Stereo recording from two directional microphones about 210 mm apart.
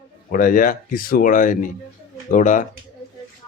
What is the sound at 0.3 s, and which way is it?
Speech, 40° left (ahead or behind).